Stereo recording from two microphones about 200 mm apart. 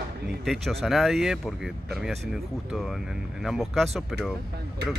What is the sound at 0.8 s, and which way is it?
Speech, centre (ahead or behind).